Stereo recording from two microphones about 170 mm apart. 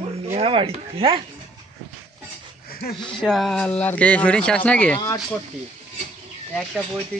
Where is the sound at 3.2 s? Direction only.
Centre (ahead or behind).